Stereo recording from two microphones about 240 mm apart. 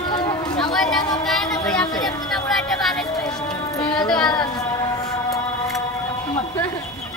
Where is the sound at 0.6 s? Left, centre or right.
Centre.